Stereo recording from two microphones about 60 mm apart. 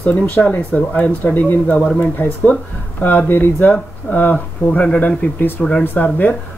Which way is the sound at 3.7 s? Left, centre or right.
Left.